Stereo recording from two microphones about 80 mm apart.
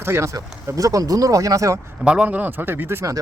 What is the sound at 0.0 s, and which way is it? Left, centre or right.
Speech, right.